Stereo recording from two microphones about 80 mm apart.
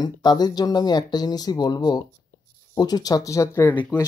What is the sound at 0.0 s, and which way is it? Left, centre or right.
Speech, left.